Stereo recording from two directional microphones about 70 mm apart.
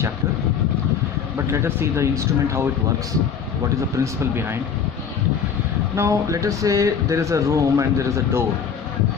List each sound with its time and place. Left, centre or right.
1.5 s speech: right
3.9 s speech: right
6.0 s speech: right